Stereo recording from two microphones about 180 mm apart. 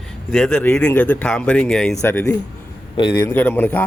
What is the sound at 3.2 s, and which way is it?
Speech, 10° left (ahead or behind).